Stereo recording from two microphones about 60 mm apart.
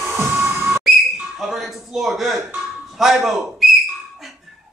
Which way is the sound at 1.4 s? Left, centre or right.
Centre.